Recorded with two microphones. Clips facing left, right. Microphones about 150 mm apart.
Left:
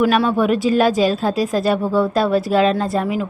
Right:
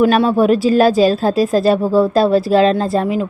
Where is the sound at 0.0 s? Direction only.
30° right (ahead or behind).